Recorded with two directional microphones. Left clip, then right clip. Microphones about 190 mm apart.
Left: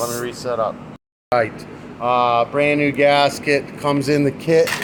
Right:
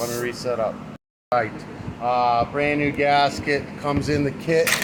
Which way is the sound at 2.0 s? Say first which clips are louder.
Left 3 dB; 50° left (ahead or behind).